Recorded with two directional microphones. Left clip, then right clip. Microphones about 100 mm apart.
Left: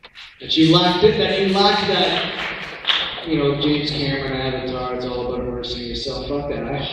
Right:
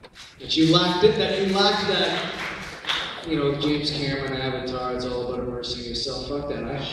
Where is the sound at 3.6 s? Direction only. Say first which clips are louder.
Left 4 dB; 20° left (ahead or behind).